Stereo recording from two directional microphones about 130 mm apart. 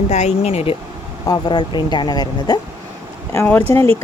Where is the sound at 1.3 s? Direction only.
35° left (ahead or behind).